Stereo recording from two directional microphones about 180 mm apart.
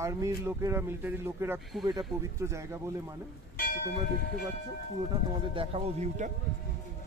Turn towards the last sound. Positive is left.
turn(degrees=-35)  # may be behind; listen again after turning